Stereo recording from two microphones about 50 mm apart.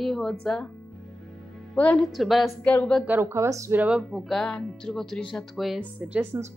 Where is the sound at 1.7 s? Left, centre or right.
Left.